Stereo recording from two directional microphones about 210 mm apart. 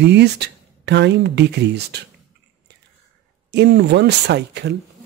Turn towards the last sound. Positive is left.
turn(degrees=-55)  # may be behind; listen again after turning